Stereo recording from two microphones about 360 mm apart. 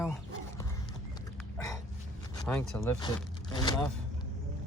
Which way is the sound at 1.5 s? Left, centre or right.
Centre.